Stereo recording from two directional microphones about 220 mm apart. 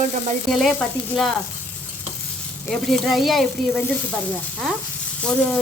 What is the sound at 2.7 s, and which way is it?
Speech, centre (ahead or behind).